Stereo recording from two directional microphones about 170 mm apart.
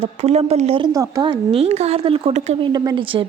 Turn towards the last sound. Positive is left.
turn(degrees=-30)  # may be behind; listen again after turning